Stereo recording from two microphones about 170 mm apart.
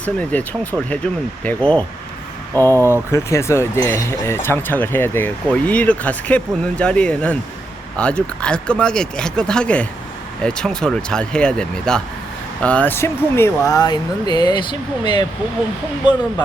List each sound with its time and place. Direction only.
0.0 s speech: 10° left (ahead or behind); by 15.3 s 25° left (ahead or behind)